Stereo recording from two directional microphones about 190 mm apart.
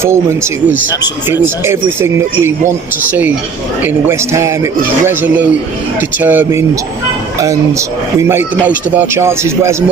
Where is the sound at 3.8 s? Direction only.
10° right (ahead or behind).